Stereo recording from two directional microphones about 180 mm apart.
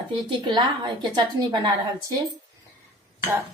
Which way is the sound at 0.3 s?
25° right (ahead or behind).